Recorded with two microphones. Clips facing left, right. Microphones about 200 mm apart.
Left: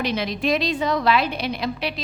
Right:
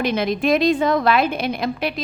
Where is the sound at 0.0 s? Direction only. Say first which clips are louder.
Right 4 dB; 50° right (ahead or behind).